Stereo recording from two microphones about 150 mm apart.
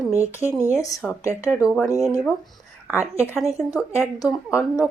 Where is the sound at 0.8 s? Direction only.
20° left (ahead or behind).